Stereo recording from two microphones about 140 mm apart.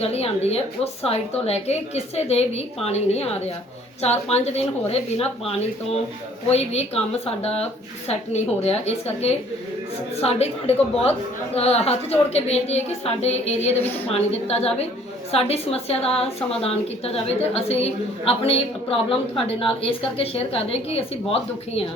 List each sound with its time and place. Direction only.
0.0 s speech: 45° left (ahead or behind)
13.7 s a woman's voice: 15° left (ahead or behind)
14.1 s speech: 45° left (ahead or behind)